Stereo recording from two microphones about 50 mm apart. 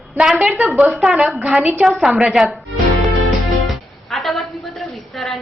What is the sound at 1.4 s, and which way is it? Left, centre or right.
Speech, right.